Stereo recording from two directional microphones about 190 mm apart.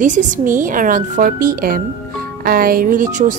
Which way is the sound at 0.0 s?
40° right (ahead or behind).